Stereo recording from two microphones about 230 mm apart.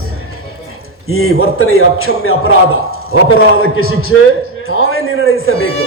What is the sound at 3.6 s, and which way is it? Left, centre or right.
A man's voice, left.